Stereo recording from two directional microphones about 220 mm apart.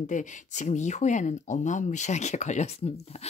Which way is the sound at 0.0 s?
35° left (ahead or behind).